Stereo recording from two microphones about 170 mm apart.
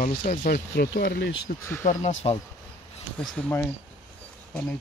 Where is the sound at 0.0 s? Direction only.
45° left (ahead or behind).